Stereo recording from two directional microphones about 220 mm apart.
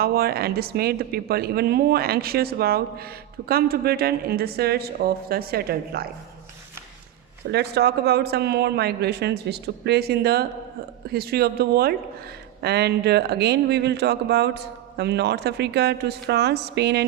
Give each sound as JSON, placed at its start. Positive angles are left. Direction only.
{"t": 0.0, "sound": "speech", "side_deg": -45}
{"t": 7.5, "sound": "speech", "side_deg": -50}